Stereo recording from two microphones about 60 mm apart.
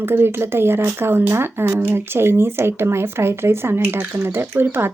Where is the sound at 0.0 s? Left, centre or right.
Right.